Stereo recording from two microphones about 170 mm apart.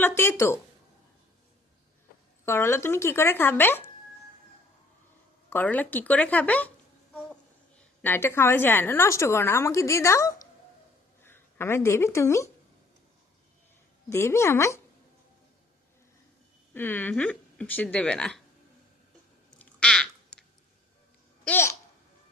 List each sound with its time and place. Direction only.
0.0 s a woman's voice: 15° left (ahead or behind)
2.4 s a woman's voice: 15° left (ahead or behind)
5.5 s a woman's voice: 10° left (ahead or behind)
8.0 s a woman's voice: 15° left (ahead or behind)
14.1 s a woman's voice: 15° left (ahead or behind)
16.7 s a woman's voice: 10° left (ahead or behind)
19.5 s a sound: 5° left (ahead or behind)
21.4 s babbling: 15° left (ahead or behind)